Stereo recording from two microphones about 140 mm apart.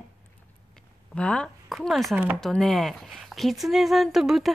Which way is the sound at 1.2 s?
5° left (ahead or behind).